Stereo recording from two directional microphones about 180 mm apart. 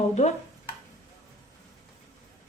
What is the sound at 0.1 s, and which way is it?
Speech, 40° left (ahead or behind).